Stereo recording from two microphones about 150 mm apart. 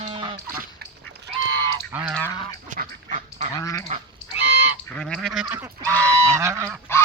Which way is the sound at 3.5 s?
25° left (ahead or behind).